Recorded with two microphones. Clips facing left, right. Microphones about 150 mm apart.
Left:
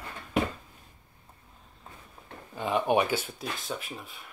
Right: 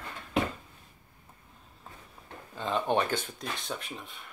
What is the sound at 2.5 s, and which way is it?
Speech, 10° left (ahead or behind).